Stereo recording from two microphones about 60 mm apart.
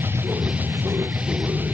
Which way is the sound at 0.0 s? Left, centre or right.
Right.